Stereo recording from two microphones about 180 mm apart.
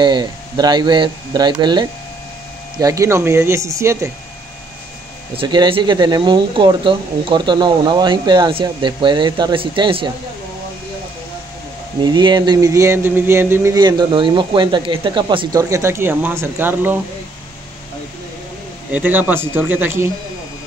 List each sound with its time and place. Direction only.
0.0 s speech: 25° right (ahead or behind)
5.3 s speech: 25° right (ahead or behind)
12.0 s speech: 25° right (ahead or behind)
18.9 s speech: 10° right (ahead or behind)